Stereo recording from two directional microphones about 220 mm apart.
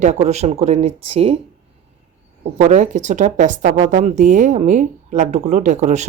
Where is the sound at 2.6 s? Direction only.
30° right (ahead or behind).